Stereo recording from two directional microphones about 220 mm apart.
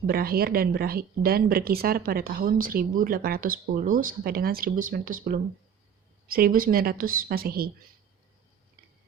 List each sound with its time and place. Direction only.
0.1 s a woman's voice: 45° right (ahead or behind)